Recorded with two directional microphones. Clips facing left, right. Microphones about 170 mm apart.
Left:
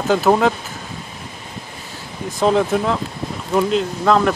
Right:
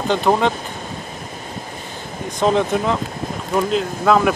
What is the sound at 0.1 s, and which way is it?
Speech, 5° left (ahead or behind).